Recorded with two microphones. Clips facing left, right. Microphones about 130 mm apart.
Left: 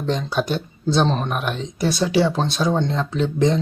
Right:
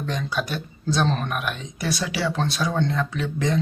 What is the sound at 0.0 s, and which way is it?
Speech, 25° left (ahead or behind).